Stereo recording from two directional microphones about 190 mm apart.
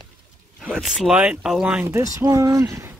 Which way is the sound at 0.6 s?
Centre (ahead or behind).